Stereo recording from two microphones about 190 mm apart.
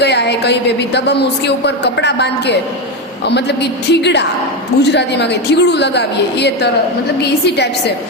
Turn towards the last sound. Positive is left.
turn(degrees=60)  # may be behind; listen again after turning